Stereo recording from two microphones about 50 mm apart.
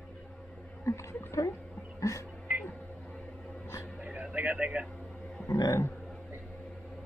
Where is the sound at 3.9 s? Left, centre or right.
Centre.